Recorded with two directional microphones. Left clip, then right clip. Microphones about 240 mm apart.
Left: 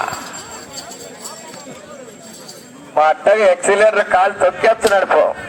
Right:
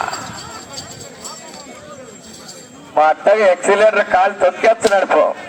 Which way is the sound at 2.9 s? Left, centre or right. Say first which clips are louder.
Even; centre.